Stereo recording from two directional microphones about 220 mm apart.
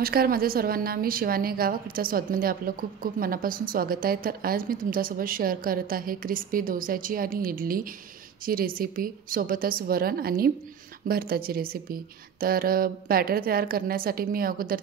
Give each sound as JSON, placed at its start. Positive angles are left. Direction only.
{"t": 0.0, "sound": "a woman's voice", "side_deg": -40}